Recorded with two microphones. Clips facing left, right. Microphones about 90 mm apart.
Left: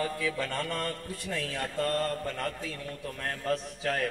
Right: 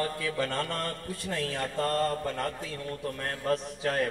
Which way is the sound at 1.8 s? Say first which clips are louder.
Right 2 dB; 35° right (ahead or behind).